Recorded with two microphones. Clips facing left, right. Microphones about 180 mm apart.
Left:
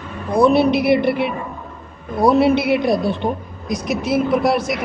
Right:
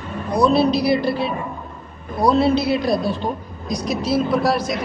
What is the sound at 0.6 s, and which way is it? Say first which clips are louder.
Speech: left 2 dB; 20° left (ahead or behind).